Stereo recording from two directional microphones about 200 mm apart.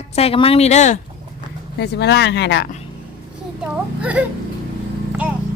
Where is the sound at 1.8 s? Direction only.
60° left (ahead or behind).